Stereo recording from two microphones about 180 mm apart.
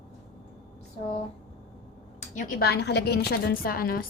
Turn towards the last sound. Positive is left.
turn(degrees=55)  # may be behind; listen again after turning